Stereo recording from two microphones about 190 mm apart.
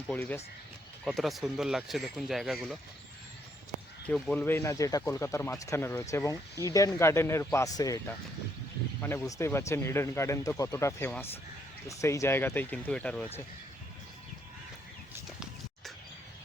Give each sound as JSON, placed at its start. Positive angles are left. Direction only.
{"t": 0.1, "sound": "speech", "side_deg": 10}
{"t": 4.0, "sound": "speech", "side_deg": 5}